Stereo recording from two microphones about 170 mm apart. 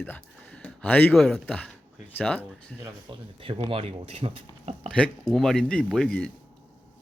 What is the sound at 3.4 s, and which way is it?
Speech, 30° right (ahead or behind).